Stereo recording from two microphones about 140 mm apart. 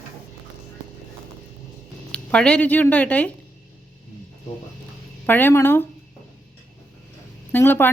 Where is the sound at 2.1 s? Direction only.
10° left (ahead or behind).